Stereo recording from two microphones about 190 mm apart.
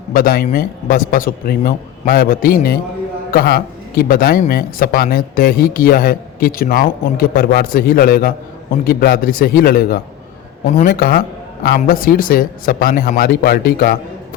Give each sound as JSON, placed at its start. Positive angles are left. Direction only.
{"t": 0.1, "sound": "speech", "side_deg": 50}